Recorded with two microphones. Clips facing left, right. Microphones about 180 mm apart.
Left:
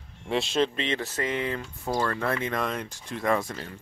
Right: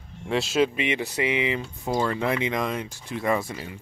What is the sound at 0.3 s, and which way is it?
Speech, 5° right (ahead or behind).